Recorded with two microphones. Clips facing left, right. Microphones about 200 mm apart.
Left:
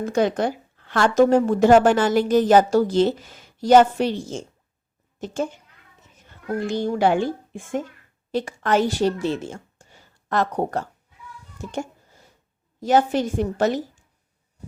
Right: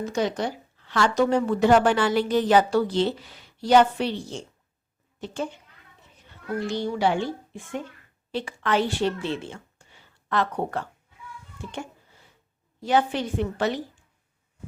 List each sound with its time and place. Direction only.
0.0 s a woman's voice: 50° left (ahead or behind)
5.2 s a woman's voice: 45° left (ahead or behind)
11.5 s a sound: 40° left (ahead or behind)
12.8 s a woman's voice: 45° left (ahead or behind)